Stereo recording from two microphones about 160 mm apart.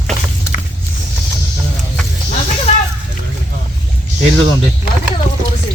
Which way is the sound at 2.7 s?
45° left (ahead or behind).